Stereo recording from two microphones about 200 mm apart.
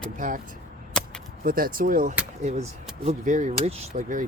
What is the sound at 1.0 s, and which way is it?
Whip, 5° left (ahead or behind).